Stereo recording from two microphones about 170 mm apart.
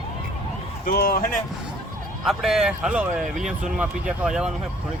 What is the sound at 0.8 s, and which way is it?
Speech, 65° left (ahead or behind).